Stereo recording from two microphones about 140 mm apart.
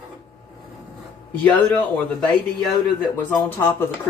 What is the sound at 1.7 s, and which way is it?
Speech, 10° left (ahead or behind).